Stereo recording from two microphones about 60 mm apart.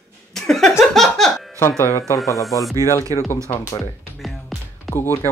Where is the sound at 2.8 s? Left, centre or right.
Left.